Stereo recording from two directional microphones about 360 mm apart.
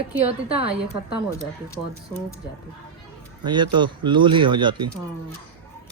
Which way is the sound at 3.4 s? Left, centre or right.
Centre.